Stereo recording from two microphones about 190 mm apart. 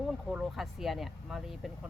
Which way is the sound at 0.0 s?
Centre (ahead or behind).